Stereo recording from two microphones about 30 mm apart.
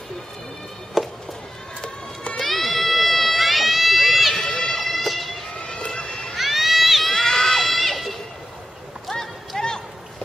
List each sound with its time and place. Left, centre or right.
1.0 s a sound: centre
2.4 s a sound: centre
4.0 s run: centre
4.5 s run: centre
4.8 s a sound: centre
5.9 s run: left
6.3 s run: centre
7.1 s crowd: centre
7.5 s crowd: centre
9.1 s run: centre
9.5 s run: left